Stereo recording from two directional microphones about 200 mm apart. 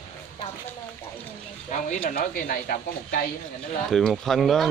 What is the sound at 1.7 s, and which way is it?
Speech, 40° left (ahead or behind).